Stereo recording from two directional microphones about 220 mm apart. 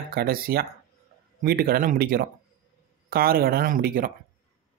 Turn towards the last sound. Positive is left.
turn(degrees=-40)  # may be behind; listen again after turning